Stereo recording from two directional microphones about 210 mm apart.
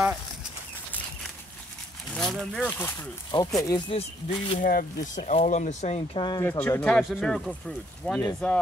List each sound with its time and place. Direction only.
2.1 s speech: centre (ahead or behind)
3.3 s speech: 20° left (ahead or behind)
4.6 s speech: 40° left (ahead or behind); by 6.4 s 20° left (ahead or behind)
6.4 s speech: 10° left (ahead or behind)